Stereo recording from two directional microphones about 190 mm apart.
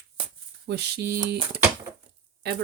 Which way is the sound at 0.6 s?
60° right (ahead or behind).